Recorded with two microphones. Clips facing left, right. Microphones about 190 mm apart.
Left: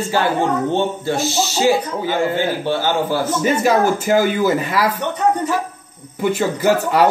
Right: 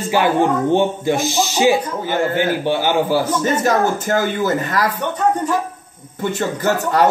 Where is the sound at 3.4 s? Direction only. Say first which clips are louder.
Left 1 dB; 10° left (ahead or behind).